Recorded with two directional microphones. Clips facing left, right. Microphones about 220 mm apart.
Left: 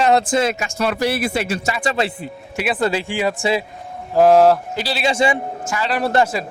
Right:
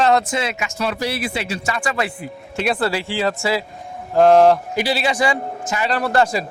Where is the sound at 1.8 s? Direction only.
25° left (ahead or behind).